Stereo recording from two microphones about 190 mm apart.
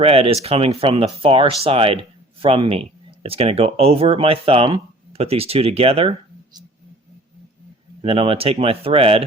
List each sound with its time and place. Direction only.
0.0 s speech: 30° right (ahead or behind)
8.0 s speech: 30° right (ahead or behind)